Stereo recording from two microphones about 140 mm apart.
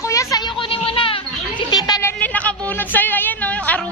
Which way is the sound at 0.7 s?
40° left (ahead or behind).